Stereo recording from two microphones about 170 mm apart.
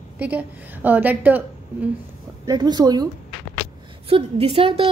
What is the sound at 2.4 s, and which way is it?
Speech, 25° right (ahead or behind).